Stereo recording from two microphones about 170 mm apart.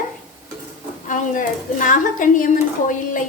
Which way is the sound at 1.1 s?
50° left (ahead or behind).